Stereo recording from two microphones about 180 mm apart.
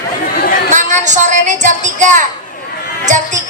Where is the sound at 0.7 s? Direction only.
45° right (ahead or behind).